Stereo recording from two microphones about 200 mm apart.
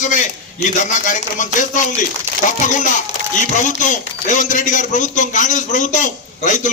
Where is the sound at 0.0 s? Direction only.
40° left (ahead or behind).